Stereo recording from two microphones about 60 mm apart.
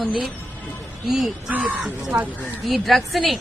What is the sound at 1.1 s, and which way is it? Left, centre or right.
Speech, centre.